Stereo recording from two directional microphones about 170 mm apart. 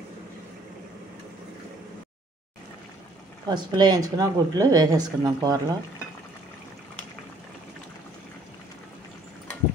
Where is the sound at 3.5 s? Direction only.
25° right (ahead or behind).